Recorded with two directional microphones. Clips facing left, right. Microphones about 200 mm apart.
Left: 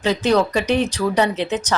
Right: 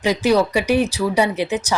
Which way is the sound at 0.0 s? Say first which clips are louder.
Right 1 dB; 10° right (ahead or behind).